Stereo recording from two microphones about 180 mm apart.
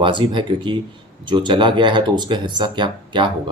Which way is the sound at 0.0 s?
25° right (ahead or behind).